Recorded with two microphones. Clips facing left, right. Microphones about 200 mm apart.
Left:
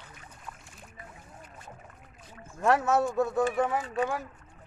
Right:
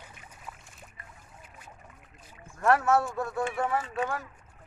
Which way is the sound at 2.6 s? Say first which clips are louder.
Even; 20° left (ahead or behind).